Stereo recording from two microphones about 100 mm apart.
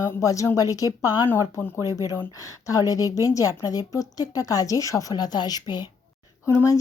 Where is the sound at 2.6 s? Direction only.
35° left (ahead or behind).